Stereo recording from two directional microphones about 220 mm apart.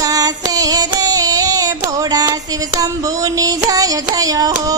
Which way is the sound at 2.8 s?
15° right (ahead or behind).